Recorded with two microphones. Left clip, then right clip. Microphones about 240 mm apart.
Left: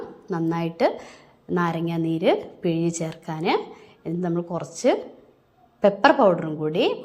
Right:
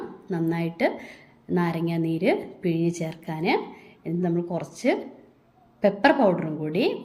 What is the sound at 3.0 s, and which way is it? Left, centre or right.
A woman's voice, left.